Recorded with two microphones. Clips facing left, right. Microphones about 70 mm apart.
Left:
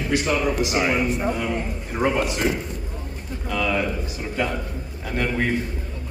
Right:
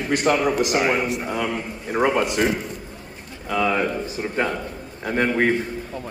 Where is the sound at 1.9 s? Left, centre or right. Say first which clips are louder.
Right 2 dB; right.